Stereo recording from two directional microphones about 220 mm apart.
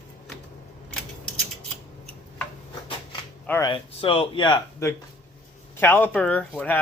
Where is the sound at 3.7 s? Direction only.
25° left (ahead or behind).